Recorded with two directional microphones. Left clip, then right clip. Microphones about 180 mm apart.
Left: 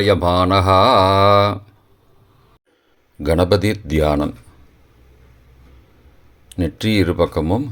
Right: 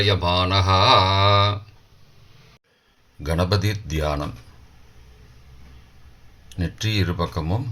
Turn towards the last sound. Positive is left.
turn(degrees=45)  # may be behind; listen again after turning